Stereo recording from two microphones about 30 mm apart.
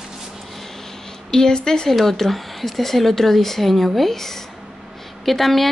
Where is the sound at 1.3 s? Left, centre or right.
Centre.